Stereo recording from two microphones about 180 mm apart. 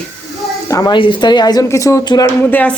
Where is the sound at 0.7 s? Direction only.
20° left (ahead or behind).